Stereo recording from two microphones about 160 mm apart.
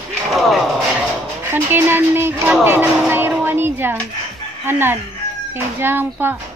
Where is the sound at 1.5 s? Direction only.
15° right (ahead or behind).